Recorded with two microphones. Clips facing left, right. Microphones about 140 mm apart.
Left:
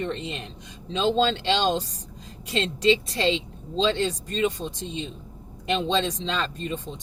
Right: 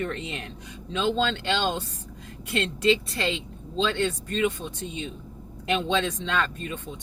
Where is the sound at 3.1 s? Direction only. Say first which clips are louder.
Left 5 dB; 25° left (ahead or behind).